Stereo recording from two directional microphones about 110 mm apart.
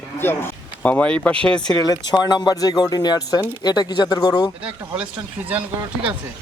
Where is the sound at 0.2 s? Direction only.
20° left (ahead or behind).